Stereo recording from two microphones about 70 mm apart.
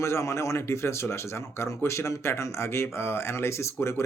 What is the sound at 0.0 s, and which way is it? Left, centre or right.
Speech, left.